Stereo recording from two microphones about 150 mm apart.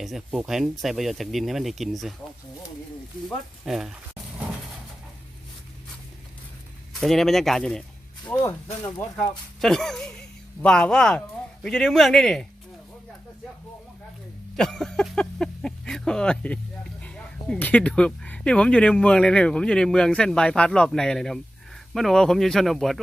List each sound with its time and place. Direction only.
0.0 s speech: 5° right (ahead or behind)
3.2 s speech: centre (ahead or behind)
7.0 s speech: centre (ahead or behind)
8.3 s speech: 15° left (ahead or behind)
9.1 s speech: 5° left (ahead or behind)
14.5 s a sound: 5° left (ahead or behind)
17.0 s speech: 10° left (ahead or behind)